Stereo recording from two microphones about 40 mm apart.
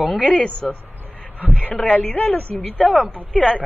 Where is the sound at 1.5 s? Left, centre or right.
Left.